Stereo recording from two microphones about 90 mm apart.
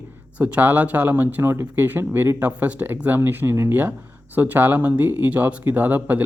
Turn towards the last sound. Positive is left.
turn(degrees=-20)  # may be behind; listen again after turning